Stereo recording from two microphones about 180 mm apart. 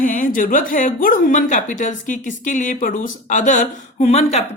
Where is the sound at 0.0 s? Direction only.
45° left (ahead or behind).